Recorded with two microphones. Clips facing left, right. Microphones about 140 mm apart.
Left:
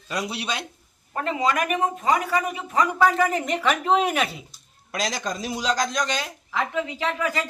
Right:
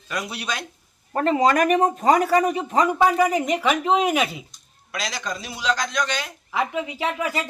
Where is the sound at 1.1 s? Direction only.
45° right (ahead or behind).